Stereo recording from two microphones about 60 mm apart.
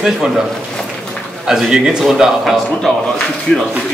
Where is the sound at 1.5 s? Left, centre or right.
Centre.